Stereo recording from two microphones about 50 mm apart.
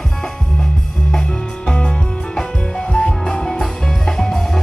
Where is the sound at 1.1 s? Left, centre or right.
Centre.